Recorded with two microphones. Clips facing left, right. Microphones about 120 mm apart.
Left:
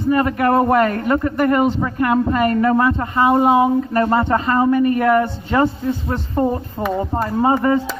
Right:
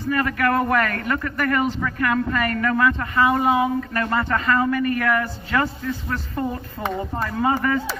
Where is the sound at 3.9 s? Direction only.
30° left (ahead or behind).